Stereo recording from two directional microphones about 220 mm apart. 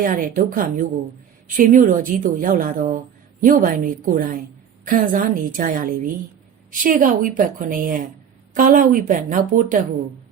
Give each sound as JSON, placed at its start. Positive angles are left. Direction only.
{"t": 0.0, "sound": "a woman's voice", "side_deg": -40}